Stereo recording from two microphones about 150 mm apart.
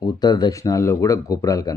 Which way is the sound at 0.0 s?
25° left (ahead or behind).